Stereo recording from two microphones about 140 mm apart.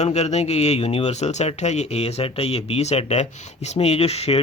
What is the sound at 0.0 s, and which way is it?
Speech, 50° left (ahead or behind).